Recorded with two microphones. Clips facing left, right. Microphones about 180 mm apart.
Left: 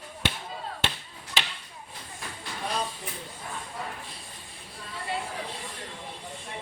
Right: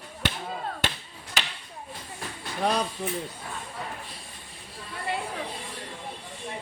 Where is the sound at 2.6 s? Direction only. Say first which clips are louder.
Right 7 dB; 75° right (ahead or behind).